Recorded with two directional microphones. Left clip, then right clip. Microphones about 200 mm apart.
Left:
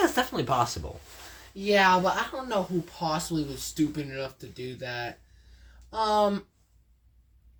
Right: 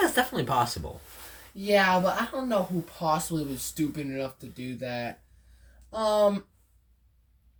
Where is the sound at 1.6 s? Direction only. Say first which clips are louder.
Left 1 dB; 10° right (ahead or behind).